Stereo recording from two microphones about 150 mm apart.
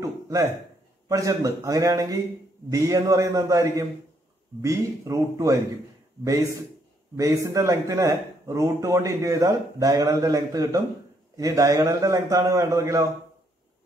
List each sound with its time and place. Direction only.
0.0 s a sound: 20° right (ahead or behind)
1.0 s speech: 20° right (ahead or behind)
7.2 s speech: 20° right (ahead or behind)